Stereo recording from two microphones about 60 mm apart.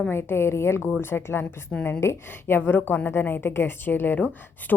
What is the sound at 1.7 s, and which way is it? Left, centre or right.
Speech, left.